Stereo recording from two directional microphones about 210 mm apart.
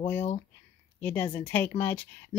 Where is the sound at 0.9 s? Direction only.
10° left (ahead or behind).